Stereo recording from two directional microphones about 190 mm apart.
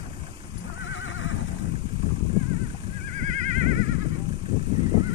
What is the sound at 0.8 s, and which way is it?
Neigh, 90° left.